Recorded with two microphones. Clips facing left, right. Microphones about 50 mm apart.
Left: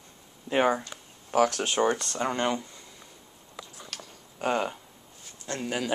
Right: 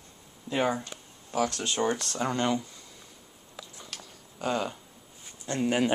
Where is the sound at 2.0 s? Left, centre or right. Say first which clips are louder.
Left 1 dB; centre.